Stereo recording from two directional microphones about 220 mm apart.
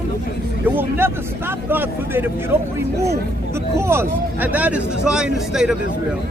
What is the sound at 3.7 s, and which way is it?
Speech, 10° right (ahead or behind).